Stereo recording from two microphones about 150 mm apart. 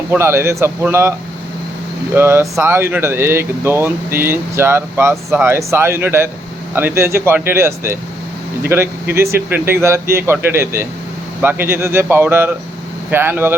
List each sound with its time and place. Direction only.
0.1 s speech: 15° right (ahead or behind)
2.1 s speech: 15° right (ahead or behind)